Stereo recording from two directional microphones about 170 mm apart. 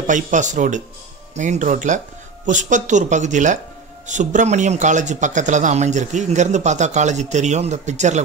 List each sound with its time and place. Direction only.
0.0 s speech: 45° right (ahead or behind)